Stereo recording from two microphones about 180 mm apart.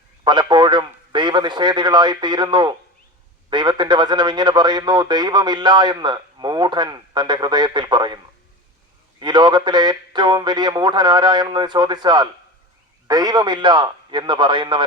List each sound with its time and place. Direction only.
0.3 s a man's voice: 25° right (ahead or behind)
9.2 s a man's voice: 25° right (ahead or behind)